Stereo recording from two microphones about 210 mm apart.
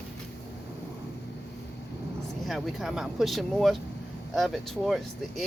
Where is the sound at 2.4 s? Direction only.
Centre (ahead or behind).